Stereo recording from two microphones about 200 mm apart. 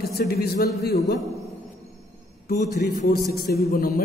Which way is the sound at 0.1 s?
50° left (ahead or behind).